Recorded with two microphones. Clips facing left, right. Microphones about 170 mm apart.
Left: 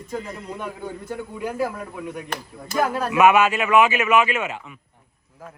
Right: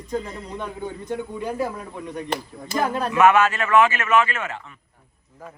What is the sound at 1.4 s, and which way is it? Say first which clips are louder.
Speech: left 4 dB; 5° left (ahead or behind).